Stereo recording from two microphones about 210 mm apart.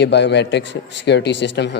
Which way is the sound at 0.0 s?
55° left (ahead or behind).